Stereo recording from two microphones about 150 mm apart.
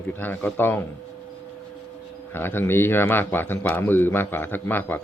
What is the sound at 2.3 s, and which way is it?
A man's voice, 15° left (ahead or behind).